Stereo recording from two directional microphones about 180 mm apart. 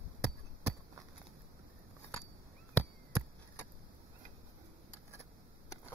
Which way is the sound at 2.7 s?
10° left (ahead or behind).